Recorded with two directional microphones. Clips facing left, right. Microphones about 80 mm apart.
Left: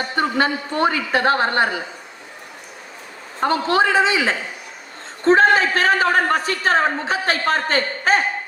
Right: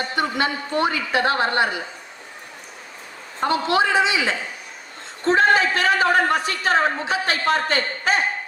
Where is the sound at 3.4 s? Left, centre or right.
Left.